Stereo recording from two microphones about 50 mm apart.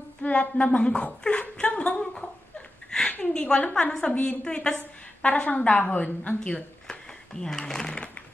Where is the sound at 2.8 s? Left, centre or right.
Centre.